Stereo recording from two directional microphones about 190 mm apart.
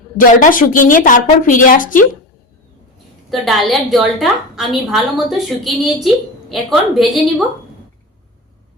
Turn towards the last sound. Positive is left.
turn(degrees=0)  # may be behind; listen again after turning